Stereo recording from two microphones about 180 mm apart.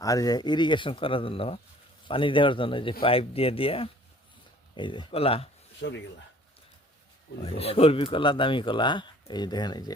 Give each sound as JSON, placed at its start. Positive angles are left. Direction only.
{"t": 0.0, "sound": "speech", "side_deg": 20}
{"t": 5.8, "sound": "speech", "side_deg": 75}
{"t": 7.4, "sound": "speech", "side_deg": 30}